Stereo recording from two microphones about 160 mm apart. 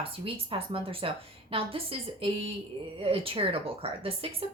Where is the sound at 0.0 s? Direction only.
35° right (ahead or behind).